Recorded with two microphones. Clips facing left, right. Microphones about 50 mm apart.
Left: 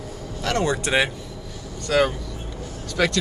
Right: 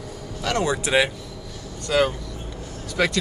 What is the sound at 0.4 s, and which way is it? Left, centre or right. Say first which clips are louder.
Speech: even; centre.